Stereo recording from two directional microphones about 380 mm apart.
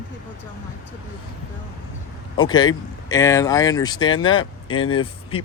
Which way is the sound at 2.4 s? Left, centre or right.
Centre.